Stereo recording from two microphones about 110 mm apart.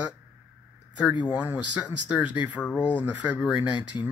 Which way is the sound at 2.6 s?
15° left (ahead or behind).